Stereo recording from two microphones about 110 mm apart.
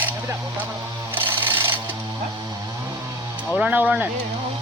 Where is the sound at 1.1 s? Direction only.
20° right (ahead or behind).